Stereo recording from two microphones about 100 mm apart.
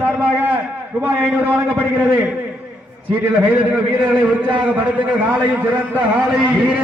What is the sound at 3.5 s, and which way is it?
A man's voice, 15° right (ahead or behind).